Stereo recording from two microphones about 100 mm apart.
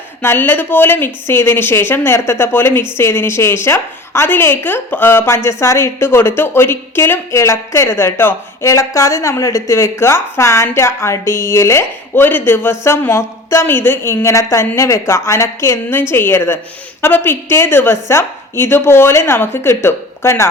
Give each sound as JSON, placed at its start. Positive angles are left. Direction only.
{"t": 0.2, "sound": "speech", "side_deg": 25}